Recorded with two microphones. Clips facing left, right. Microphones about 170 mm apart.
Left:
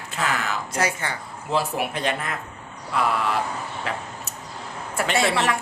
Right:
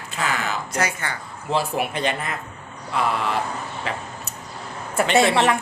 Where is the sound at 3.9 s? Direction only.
Centre (ahead or behind).